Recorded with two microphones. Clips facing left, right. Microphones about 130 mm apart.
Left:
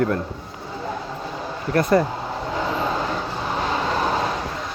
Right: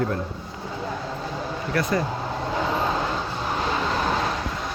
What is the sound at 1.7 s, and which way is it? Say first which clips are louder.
Speech: left 7 dB; 50° left (ahead or behind).